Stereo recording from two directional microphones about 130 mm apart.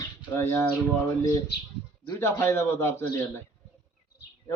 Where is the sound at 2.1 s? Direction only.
20° left (ahead or behind).